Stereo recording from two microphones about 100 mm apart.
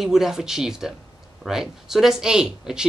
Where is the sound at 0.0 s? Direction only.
5° right (ahead or behind).